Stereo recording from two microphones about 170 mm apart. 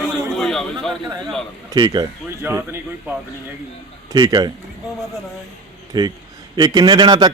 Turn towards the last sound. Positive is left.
turn(degrees=-25)  # may be behind; listen again after turning